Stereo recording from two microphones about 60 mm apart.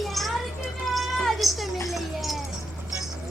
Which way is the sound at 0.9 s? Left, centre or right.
Centre.